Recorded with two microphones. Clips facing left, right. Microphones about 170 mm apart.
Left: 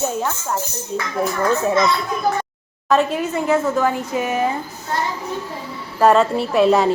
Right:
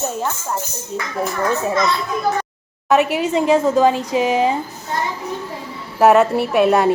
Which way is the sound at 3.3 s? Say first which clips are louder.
Right 4 dB; 20° right (ahead or behind).